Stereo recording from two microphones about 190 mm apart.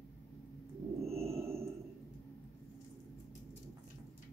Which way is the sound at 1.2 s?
30° right (ahead or behind).